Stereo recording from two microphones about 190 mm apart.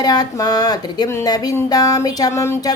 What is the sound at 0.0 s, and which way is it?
Speech, 20° left (ahead or behind).